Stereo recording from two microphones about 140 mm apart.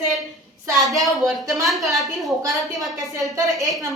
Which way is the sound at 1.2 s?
25° right (ahead or behind).